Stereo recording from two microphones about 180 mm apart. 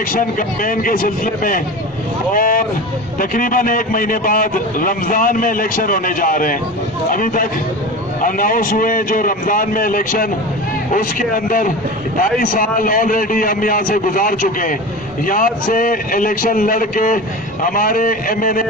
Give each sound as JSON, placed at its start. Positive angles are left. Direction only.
{"t": 0.1, "sound": "a man's voice", "side_deg": 50}